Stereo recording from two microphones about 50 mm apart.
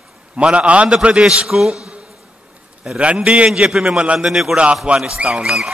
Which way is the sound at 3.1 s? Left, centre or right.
Right.